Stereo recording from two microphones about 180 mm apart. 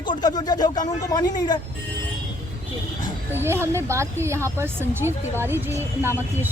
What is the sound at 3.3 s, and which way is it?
Speech, 15° right (ahead or behind).